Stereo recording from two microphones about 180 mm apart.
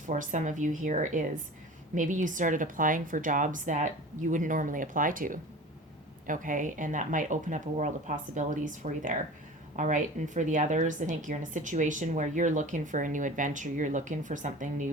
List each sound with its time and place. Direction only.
0.1 s speech: 45° right (ahead or behind)